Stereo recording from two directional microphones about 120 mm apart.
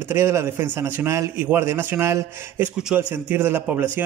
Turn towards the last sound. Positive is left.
turn(degrees=-15)  # may be behind; listen again after turning